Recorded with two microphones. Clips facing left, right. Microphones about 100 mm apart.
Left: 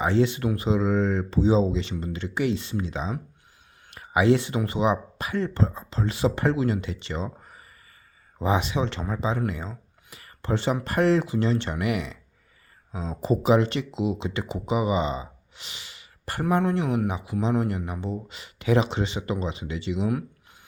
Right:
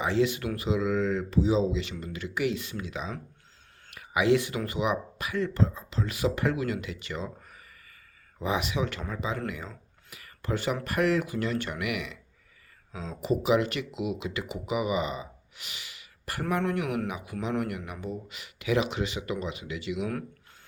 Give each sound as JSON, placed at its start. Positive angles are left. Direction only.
{"t": 0.0, "sound": "speech", "side_deg": 30}
{"t": 9.5, "sound": "a sound", "side_deg": 30}
{"t": 10.8, "sound": "speech", "side_deg": 30}